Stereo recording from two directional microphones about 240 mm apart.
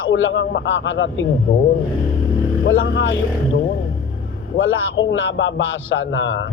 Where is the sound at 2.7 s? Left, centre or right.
Left.